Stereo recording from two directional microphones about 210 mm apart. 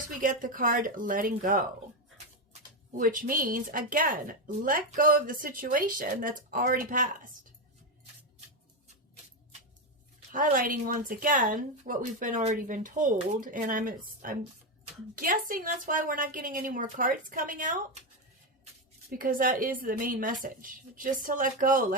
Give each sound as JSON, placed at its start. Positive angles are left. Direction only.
{"t": 0.2, "sound": "speech", "side_deg": -40}
{"t": 10.3, "sound": "speech", "side_deg": -40}
{"t": 19.2, "sound": "speech", "side_deg": -45}